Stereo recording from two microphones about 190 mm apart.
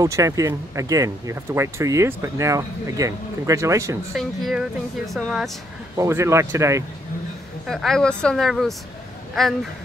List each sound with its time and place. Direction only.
0.0 s speech: 15° right (ahead or behind)
4.1 s a woman's voice: centre (ahead or behind)
5.9 s speech: 15° right (ahead or behind)
7.6 s a woman's voice: centre (ahead or behind)